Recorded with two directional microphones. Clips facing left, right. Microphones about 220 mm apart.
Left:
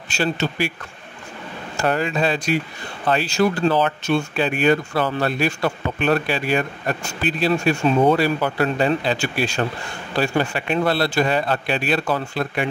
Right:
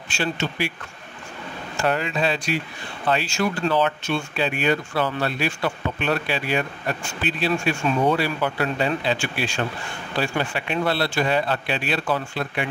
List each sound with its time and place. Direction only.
0.1 s speech: 40° left (ahead or behind)
1.8 s speech: 40° left (ahead or behind)